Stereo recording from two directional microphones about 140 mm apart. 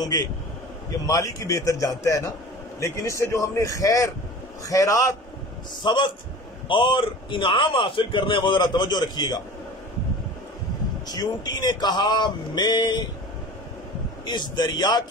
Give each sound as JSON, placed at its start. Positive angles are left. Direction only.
{"t": 1.0, "sound": "a man's voice", "side_deg": 25}
{"t": 11.1, "sound": "a man's voice", "side_deg": 30}
{"t": 14.2, "sound": "a man's voice", "side_deg": 30}